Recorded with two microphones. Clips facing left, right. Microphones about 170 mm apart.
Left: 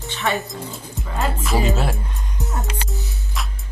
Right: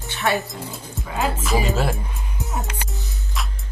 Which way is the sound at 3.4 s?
Centre (ahead or behind).